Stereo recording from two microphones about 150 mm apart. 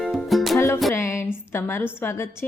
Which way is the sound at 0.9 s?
15° left (ahead or behind).